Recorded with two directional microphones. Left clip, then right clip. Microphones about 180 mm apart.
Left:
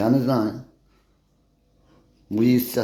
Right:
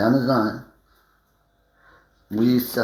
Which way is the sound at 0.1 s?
10° left (ahead or behind).